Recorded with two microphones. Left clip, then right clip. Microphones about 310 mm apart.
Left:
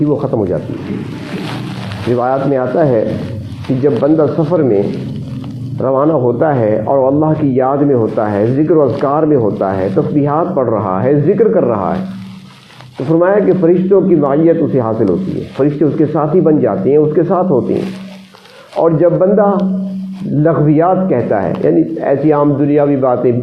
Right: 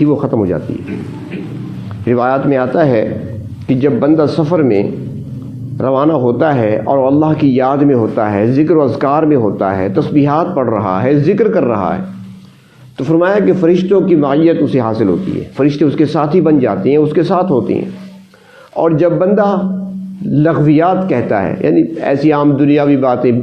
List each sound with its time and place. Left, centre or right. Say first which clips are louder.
0.0 s speech: right 1 dB; right
0.7 s speech: even; centre
2.1 s speech: right 1 dB; right
4.5 s speech: even; right
5.8 s speech: even; right
13.1 s speech: left 1 dB; right
18.8 s speech: left 1 dB; right